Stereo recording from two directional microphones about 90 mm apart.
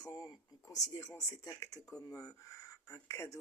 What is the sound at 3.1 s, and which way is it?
Speech, 35° left (ahead or behind).